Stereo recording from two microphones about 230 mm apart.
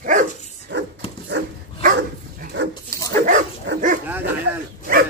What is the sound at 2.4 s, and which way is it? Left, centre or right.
Dog, right.